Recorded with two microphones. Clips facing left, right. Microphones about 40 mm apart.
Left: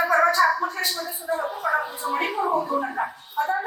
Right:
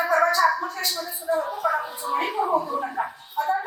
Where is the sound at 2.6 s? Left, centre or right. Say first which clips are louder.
Left 2 dB; centre.